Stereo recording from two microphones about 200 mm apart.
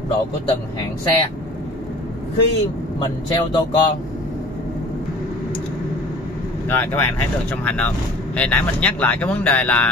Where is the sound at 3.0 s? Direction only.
20° left (ahead or behind).